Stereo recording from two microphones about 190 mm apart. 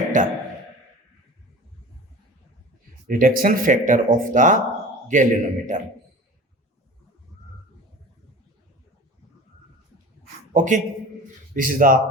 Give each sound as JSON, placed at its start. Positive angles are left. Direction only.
{"t": 0.1, "sound": "speech", "side_deg": -40}
{"t": 3.1, "sound": "a man's voice", "side_deg": -45}
{"t": 10.5, "sound": "a man's voice", "side_deg": -40}